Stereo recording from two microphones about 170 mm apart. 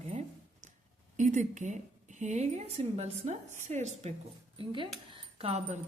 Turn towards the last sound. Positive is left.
turn(degrees=-35)  # may be behind; listen again after turning